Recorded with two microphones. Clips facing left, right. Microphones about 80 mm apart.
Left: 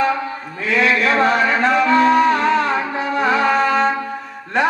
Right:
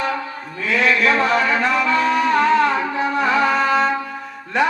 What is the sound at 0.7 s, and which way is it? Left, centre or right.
Mantra, left.